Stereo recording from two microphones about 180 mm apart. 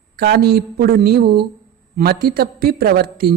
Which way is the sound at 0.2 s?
60° right (ahead or behind).